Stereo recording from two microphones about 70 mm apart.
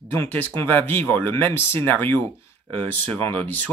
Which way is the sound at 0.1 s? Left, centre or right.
Left.